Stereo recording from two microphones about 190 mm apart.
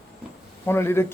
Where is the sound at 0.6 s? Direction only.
10° left (ahead or behind).